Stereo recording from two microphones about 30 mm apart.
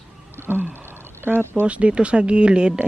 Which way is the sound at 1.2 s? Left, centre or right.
Right.